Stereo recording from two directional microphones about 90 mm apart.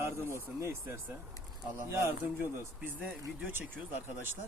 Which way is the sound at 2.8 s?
20° right (ahead or behind).